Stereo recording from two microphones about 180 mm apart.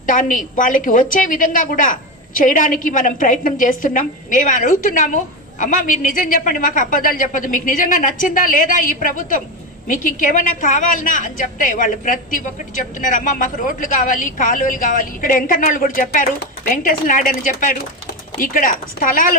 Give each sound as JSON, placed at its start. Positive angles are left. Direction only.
{"t": 0.0, "sound": "a woman's voice", "side_deg": 45}